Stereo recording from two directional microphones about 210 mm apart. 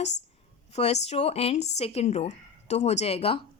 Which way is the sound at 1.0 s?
30° left (ahead or behind).